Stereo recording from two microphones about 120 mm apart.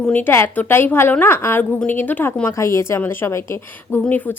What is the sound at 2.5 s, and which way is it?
A woman's voice, 25° left (ahead or behind).